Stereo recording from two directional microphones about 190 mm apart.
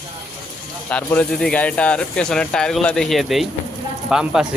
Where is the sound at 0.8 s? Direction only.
10° left (ahead or behind).